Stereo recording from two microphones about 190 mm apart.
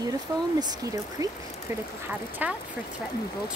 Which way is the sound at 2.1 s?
10° right (ahead or behind).